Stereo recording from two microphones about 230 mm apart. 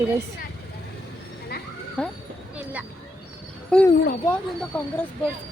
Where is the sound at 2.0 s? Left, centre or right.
Centre.